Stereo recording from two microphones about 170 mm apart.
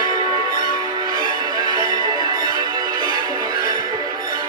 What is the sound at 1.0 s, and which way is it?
Music, 25° right (ahead or behind).